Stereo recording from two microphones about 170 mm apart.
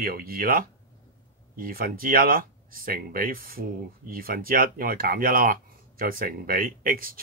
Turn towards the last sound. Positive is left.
turn(degrees=-55)  # may be behind; listen again after turning